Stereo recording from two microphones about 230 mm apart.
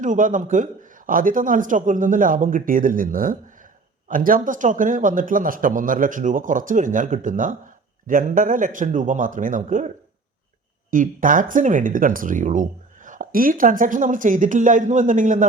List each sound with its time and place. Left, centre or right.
0.0 s speech: right
10.9 s speech: right